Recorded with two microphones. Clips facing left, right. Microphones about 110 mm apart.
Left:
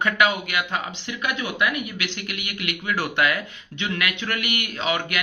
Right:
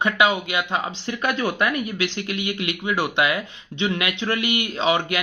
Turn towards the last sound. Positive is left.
turn(degrees=-25)  # may be behind; listen again after turning